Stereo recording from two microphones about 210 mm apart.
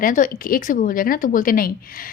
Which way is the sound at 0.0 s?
40° left (ahead or behind).